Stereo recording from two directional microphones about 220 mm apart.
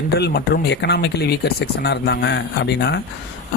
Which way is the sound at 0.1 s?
45° left (ahead or behind).